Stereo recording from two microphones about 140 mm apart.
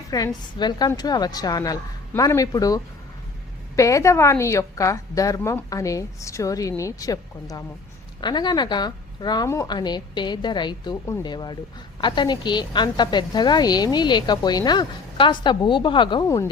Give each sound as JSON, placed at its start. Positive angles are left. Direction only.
{"t": 0.1, "sound": "a woman's voice", "side_deg": 30}